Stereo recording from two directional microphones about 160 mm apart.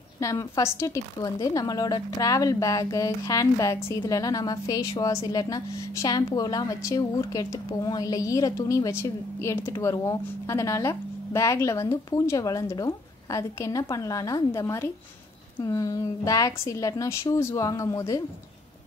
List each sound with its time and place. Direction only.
0.2 s a woman's voice: 20° left (ahead or behind)